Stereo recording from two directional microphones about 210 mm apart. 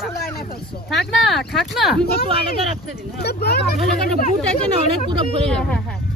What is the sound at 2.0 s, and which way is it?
Speech, 45° left (ahead or behind).